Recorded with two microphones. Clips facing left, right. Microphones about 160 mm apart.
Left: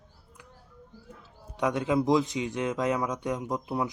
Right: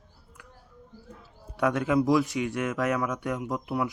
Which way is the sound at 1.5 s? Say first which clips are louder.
Right 2 dB; 20° left (ahead or behind).